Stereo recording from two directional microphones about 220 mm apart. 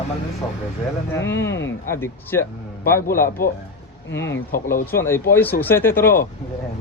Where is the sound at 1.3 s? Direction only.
55° left (ahead or behind).